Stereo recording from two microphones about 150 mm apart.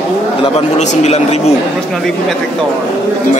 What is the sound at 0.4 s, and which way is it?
A man's voice, 45° left (ahead or behind).